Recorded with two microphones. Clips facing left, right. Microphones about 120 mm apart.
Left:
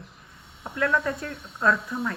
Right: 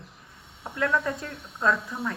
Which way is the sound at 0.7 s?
25° right (ahead or behind).